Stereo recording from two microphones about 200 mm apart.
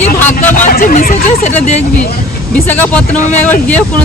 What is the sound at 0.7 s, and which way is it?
Speech, 45° left (ahead or behind).